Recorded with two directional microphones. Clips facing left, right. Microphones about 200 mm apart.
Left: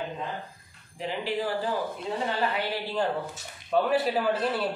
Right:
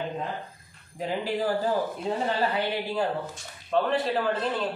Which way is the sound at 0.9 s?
45° right (ahead or behind).